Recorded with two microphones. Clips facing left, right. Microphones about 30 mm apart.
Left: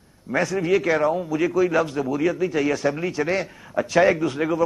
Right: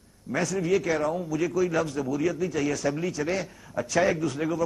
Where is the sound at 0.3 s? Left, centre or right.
Left.